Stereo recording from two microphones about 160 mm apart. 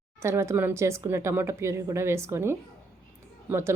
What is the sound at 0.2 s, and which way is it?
Speech, 15° right (ahead or behind).